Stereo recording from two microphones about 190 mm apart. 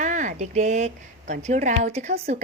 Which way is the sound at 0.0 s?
40° right (ahead or behind).